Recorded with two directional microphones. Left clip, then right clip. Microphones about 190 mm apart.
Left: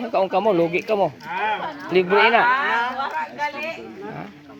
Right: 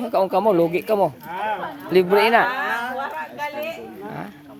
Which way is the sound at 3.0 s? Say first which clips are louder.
Left 3 dB; 25° right (ahead or behind).